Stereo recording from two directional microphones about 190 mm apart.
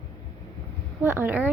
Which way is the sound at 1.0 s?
10° right (ahead or behind).